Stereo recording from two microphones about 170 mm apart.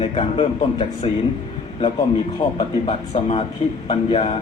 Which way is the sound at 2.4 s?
25° left (ahead or behind).